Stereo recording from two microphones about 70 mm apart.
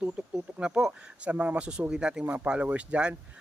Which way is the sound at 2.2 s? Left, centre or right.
Right.